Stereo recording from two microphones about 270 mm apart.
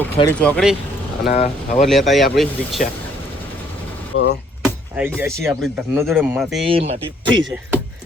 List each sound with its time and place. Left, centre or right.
0.2 s speech: centre
1.3 s speech: left
1.9 s speech: centre
4.1 s speech: left
4.6 s speech: centre
6.7 s speech: right
7.4 s speech: centre